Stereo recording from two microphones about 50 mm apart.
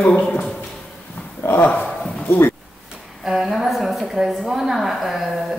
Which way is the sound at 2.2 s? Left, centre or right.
Left.